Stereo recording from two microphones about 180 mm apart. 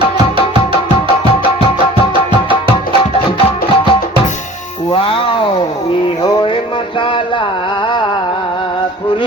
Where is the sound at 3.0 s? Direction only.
30° left (ahead or behind).